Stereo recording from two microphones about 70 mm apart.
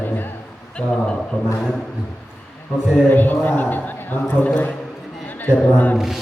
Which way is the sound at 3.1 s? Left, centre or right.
Left.